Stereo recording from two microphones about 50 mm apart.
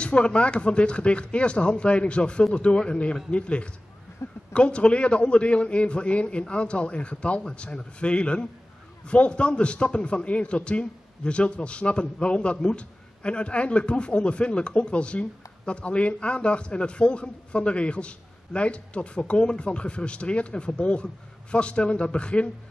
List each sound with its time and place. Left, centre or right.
0.0 s a man's voice: left